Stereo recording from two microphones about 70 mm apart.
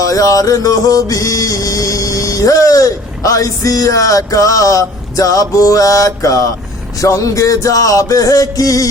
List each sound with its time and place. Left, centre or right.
0.0 s mantra: left